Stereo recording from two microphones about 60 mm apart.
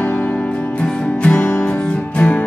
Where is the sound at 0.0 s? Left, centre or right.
Left.